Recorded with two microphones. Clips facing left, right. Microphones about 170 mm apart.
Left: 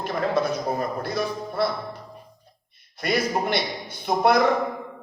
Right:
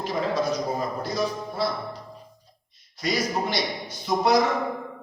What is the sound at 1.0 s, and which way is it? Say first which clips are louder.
Speech: even; 60° left (ahead or behind).